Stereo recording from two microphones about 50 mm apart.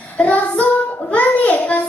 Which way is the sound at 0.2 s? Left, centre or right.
Left.